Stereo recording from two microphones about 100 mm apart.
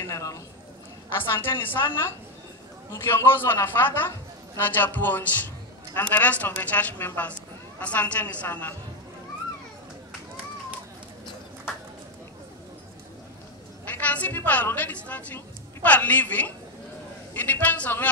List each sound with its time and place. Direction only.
0.0 s a sound: 35° left (ahead or behind)
1.1 s a man's voice: 20° left (ahead or behind)
13.8 s a woman's voice: 15° left (ahead or behind)